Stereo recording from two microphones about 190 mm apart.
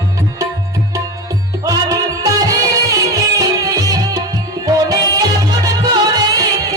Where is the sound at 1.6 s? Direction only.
20° right (ahead or behind).